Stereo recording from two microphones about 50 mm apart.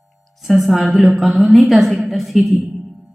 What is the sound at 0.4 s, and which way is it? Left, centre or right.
A woman's voice, centre.